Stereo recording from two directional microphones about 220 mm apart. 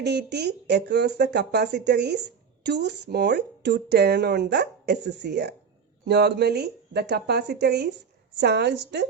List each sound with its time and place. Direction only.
0.0 s speech: 50° right (ahead or behind)